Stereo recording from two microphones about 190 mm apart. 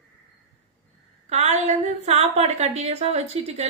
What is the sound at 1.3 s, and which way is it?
A woman's voice, 35° right (ahead or behind).